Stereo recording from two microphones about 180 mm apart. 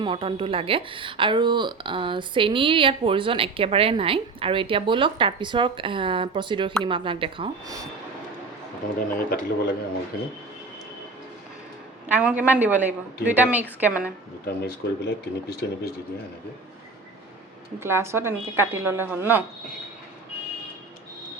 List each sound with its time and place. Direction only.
0.0 s a woman's voice: 30° right (ahead or behind)
9.1 s speech: 50° left (ahead or behind)
12.0 s a woman's voice: 10° right (ahead or behind)
14.4 s speech: 60° left (ahead or behind)
17.7 s a woman's voice: 15° right (ahead or behind)